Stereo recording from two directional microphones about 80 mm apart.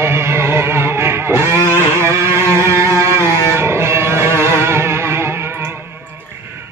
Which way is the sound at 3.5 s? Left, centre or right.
Right.